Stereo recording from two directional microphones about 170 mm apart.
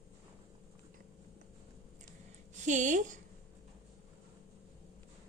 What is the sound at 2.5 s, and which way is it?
Speech, 45° right (ahead or behind).